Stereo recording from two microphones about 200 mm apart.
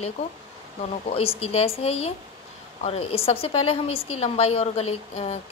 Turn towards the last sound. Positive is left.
turn(degrees=30)  # may be behind; listen again after turning